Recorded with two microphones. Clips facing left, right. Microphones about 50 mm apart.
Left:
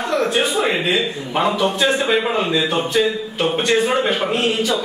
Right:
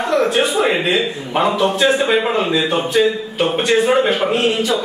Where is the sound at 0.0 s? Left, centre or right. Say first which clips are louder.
Right 3 dB; centre.